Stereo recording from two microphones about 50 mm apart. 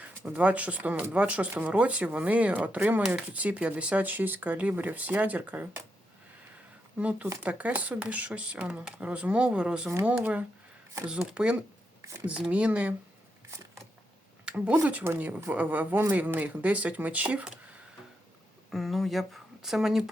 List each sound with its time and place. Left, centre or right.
0.3 s speech: right
7.0 s speech: right
10.1 s speech: right
14.4 s speech: right
18.7 s speech: centre